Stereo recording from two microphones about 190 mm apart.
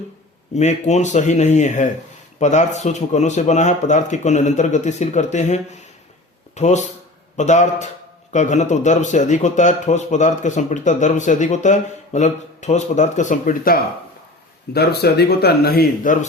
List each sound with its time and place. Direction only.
0.5 s speech: 35° left (ahead or behind); by 16.1 s 50° left (ahead or behind)